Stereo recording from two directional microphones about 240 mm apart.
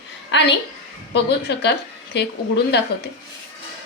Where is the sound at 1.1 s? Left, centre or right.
Left.